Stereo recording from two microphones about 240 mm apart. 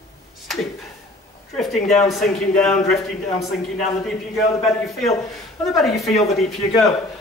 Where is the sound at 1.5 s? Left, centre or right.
Centre.